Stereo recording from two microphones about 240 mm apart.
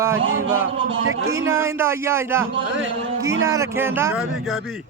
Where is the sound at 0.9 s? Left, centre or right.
Right.